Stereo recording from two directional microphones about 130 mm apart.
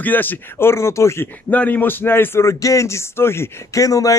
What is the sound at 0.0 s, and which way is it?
Speech, 15° left (ahead or behind).